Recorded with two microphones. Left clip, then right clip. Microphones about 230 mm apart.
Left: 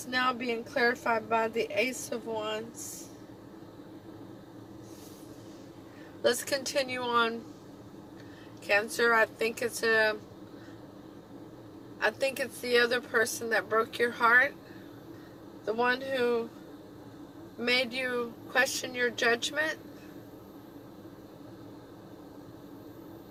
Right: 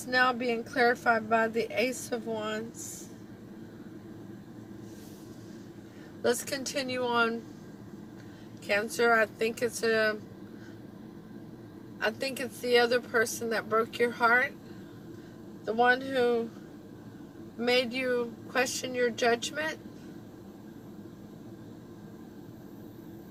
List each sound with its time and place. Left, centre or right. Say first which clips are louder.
0.1 s a woman's voice: right 3 dB; left
6.2 s a woman's voice: left 1 dB; left
8.6 s a woman's voice: even; left
11.9 s a woman's voice: left 2 dB; left
15.6 s a woman's voice: right 3 dB; left
17.6 s a woman's voice: right 1 dB; left